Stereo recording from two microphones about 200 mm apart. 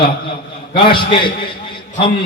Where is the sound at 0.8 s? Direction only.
25° left (ahead or behind).